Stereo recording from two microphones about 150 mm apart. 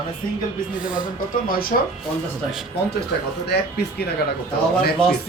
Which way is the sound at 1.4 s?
75° left (ahead or behind).